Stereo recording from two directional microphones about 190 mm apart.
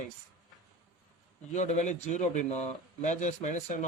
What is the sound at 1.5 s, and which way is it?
Speech, 40° left (ahead or behind).